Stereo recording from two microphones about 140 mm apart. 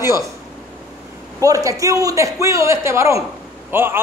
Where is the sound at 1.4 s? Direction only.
25° right (ahead or behind).